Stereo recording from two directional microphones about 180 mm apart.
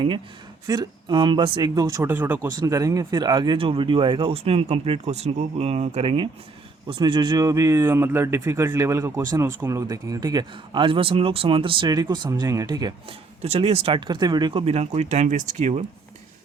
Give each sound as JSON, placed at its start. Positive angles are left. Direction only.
{"t": 0.7, "sound": "speech", "side_deg": -25}
{"t": 13.4, "sound": "speech", "side_deg": -35}